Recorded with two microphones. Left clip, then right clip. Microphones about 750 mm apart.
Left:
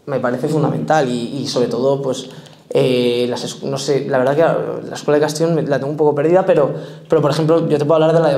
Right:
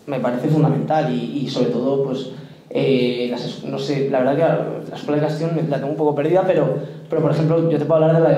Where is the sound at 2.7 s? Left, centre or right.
Left.